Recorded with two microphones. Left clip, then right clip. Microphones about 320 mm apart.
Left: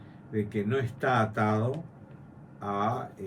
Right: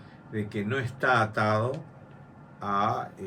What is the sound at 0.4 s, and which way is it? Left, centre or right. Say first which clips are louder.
Speech: even; centre.